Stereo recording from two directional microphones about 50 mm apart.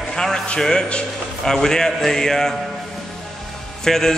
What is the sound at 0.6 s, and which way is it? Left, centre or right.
A man's voice, centre.